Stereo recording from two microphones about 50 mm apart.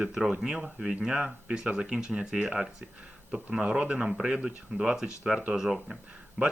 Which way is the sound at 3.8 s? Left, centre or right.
Right.